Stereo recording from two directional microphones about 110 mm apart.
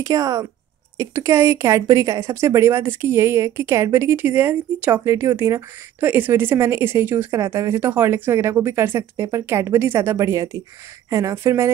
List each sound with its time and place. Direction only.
0.0 s speech: 30° right (ahead or behind)